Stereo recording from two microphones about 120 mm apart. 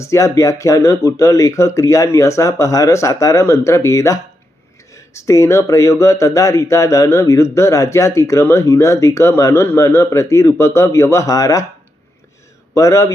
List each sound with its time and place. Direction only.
0.0 s speech: 25° left (ahead or behind)
12.7 s speech: 25° left (ahead or behind)